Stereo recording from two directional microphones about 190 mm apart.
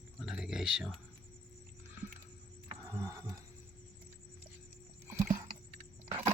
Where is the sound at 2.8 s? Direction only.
15° right (ahead or behind).